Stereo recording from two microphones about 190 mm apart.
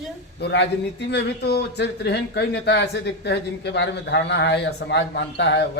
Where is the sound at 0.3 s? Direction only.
65° left (ahead or behind).